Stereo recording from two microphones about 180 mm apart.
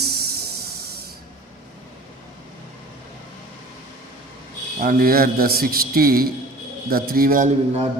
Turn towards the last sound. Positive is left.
turn(degrees=-45)  # may be behind; listen again after turning